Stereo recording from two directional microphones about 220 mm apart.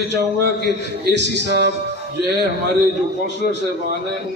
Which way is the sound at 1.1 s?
50° right (ahead or behind).